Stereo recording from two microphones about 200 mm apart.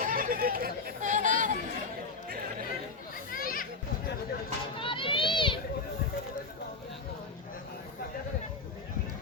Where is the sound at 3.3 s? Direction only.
45° left (ahead or behind).